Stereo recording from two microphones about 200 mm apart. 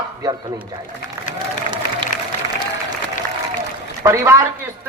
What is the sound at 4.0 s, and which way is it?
Speech, 15° right (ahead or behind).